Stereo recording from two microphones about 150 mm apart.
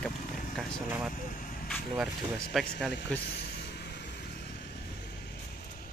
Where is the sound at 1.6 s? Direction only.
Centre (ahead or behind).